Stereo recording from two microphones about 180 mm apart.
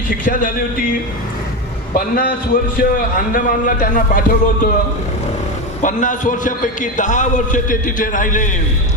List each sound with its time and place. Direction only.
0.3 s a man's voice: 50° left (ahead or behind)
2.1 s a man's voice: 55° left (ahead or behind)
5.8 s a man's voice: 45° left (ahead or behind)